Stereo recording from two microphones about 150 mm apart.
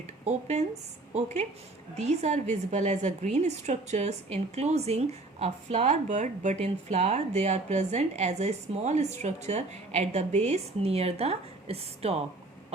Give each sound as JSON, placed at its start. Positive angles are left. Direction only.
{"t": 0.3, "sound": "a woman's voice", "side_deg": -50}